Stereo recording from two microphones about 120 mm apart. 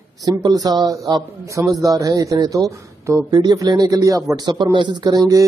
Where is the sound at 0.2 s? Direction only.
30° right (ahead or behind).